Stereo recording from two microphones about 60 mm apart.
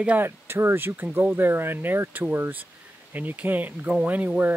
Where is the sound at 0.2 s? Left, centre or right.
Right.